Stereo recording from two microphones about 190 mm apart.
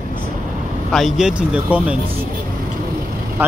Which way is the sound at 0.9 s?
Centre (ahead or behind).